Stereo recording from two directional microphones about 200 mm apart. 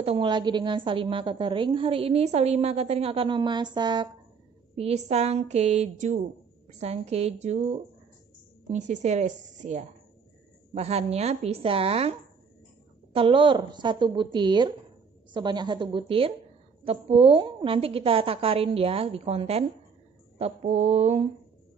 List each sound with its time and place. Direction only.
0.0 s a woman's voice: 25° right (ahead or behind)
4.7 s a woman's voice: 30° right (ahead or behind)